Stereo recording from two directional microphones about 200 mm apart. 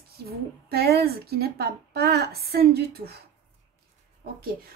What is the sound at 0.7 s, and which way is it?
A woman's voice, 50° right (ahead or behind).